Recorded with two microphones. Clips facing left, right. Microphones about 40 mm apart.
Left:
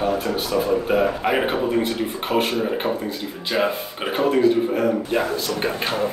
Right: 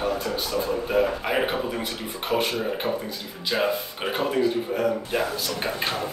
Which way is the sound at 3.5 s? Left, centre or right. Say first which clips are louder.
Left 2 dB; centre.